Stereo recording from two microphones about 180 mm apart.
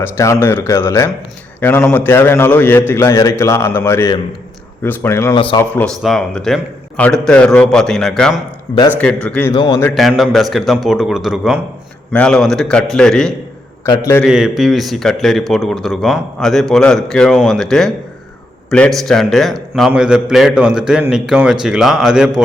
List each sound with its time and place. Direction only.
0.0 s a man's voice: 15° left (ahead or behind)
5.3 s a man's voice: 30° left (ahead or behind)
5.5 s a man's voice: 10° left (ahead or behind)
9.5 s a man's voice: 20° left (ahead or behind)
9.9 s a man's voice: centre (ahead or behind)
13.8 s a man's voice: 15° left (ahead or behind)
14.2 s a man's voice: centre (ahead or behind)